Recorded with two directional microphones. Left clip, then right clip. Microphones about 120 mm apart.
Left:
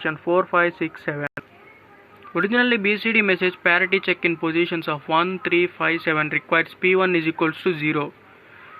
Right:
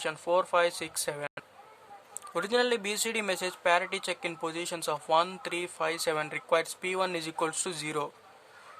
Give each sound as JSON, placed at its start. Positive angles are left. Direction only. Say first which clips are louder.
{"t": 0.0, "sound": "speech", "louder": "left 7 dB", "side_deg": -45}